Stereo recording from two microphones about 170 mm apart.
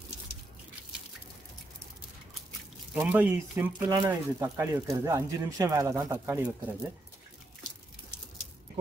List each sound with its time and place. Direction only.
2.9 s speech: 10° right (ahead or behind)